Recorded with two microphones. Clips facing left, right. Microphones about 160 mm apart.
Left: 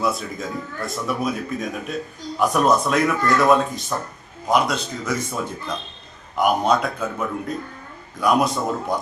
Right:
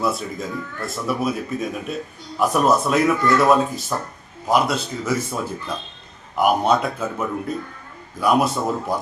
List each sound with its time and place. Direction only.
0.0 s speech: centre (ahead or behind)